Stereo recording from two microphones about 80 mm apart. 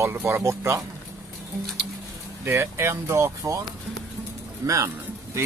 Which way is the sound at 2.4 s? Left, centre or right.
Right.